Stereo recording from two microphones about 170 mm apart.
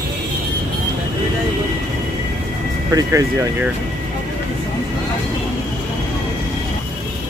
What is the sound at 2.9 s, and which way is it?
Speech, 20° right (ahead or behind).